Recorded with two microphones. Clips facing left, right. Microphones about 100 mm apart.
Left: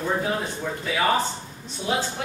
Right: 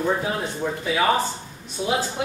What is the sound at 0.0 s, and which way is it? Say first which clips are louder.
Speech: right 2 dB; 15° right (ahead or behind).